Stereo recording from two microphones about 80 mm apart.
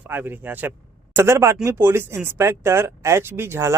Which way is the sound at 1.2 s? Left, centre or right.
Right.